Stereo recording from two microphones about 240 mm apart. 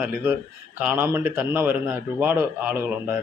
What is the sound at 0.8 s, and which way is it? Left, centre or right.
Speech, centre.